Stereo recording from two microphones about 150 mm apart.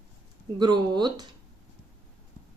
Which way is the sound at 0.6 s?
30° right (ahead or behind).